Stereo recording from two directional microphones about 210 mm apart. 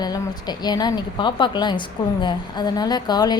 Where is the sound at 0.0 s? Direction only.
20° left (ahead or behind).